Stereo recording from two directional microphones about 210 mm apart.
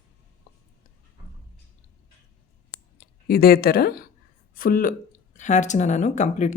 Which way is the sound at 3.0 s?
45° left (ahead or behind).